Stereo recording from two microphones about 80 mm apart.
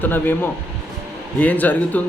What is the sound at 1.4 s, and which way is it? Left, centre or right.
Speech, left.